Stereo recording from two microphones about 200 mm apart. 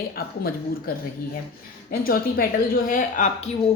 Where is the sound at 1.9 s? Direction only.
45° left (ahead or behind).